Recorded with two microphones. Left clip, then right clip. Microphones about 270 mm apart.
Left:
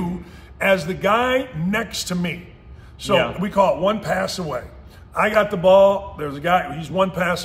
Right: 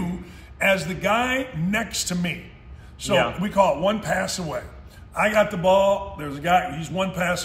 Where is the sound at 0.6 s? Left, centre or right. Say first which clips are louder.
Left 3 dB; centre.